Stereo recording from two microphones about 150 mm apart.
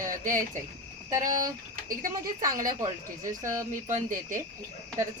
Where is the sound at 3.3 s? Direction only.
20° right (ahead or behind).